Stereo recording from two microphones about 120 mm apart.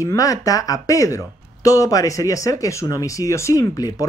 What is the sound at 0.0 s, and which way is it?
Speech, 30° left (ahead or behind).